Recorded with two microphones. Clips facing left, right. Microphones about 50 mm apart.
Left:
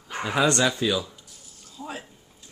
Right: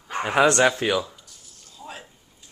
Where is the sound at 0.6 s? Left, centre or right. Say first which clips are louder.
Right 3 dB; right.